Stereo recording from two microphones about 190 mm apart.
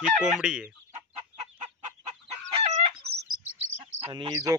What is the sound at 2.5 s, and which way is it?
Chicken, 35° right (ahead or behind).